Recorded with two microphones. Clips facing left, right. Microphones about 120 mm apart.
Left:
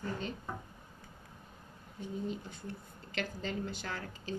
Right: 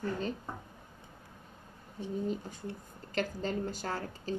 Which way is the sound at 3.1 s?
40° right (ahead or behind).